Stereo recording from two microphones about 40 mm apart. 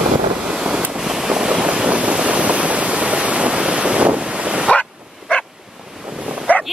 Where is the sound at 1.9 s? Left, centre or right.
Right.